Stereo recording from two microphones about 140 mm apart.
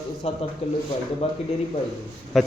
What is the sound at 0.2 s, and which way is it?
A man's voice, 45° left (ahead or behind).